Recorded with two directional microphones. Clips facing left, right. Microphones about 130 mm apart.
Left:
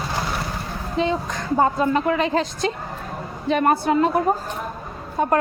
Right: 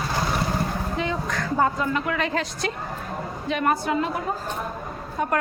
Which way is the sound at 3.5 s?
35° left (ahead or behind).